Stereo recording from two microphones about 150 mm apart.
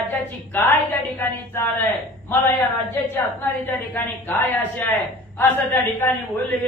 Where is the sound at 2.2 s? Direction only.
15° left (ahead or behind).